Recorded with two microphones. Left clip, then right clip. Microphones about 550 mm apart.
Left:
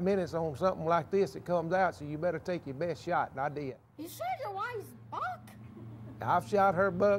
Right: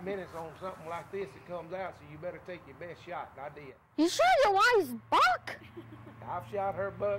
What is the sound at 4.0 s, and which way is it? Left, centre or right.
Speech, right.